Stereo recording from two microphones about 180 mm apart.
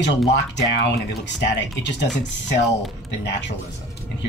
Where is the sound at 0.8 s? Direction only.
75° left (ahead or behind).